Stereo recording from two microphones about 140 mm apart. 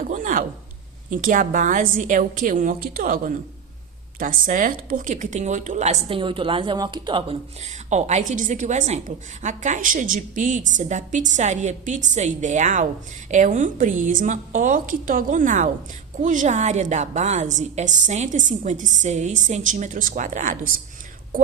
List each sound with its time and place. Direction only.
0.1 s a sound: 70° right (ahead or behind)
1.1 s a woman's voice: 70° right (ahead or behind); by 6.1 s 55° right (ahead or behind)
6.1 s a woman's voice: 35° right (ahead or behind)
7.6 s a woman's voice: 55° right (ahead or behind)